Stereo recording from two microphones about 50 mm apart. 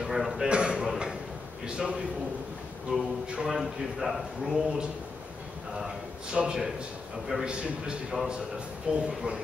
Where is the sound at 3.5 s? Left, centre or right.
Centre.